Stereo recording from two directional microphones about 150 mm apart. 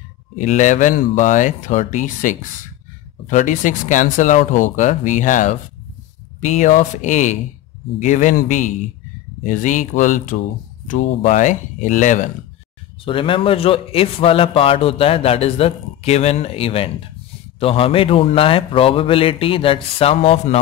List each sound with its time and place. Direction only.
0.4 s speech: 55° left (ahead or behind)
13.0 s a man's voice: 35° left (ahead or behind)